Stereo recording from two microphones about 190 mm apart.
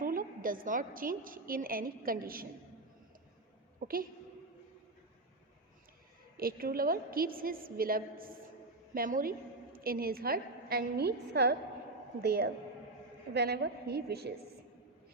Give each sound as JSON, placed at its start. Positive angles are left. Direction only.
{"t": 0.0, "sound": "a woman's voice", "side_deg": -45}
{"t": 3.8, "sound": "a sound", "side_deg": -50}
{"t": 6.3, "sound": "a woman's voice", "side_deg": -50}